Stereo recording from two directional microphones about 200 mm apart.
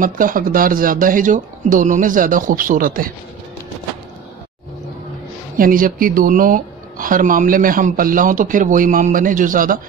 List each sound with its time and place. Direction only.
0.0 s speech: 45° right (ahead or behind)
5.6 s speech: 45° right (ahead or behind)